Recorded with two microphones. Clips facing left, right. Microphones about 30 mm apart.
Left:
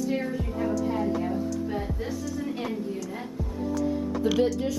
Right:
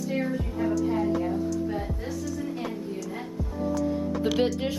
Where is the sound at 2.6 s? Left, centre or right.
Centre.